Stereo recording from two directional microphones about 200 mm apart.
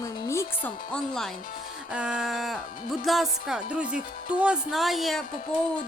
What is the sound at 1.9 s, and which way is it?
Speech, 5° right (ahead or behind).